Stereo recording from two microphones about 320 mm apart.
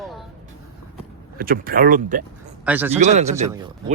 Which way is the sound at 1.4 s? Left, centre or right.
Right.